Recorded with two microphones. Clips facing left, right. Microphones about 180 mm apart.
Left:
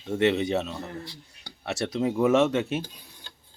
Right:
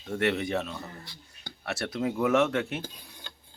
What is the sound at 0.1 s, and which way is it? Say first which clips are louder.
Speech: left 4 dB; 20° left (ahead or behind).